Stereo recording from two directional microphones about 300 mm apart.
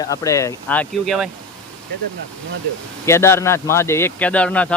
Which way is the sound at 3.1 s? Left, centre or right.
Centre.